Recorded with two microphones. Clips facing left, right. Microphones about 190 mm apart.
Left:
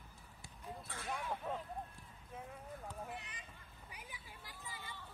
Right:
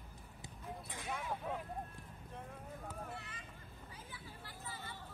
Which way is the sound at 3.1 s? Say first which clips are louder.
Even; 20° left (ahead or behind).